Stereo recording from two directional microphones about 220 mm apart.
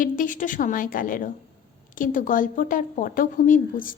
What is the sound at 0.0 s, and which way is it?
A woman's voice, 35° left (ahead or behind).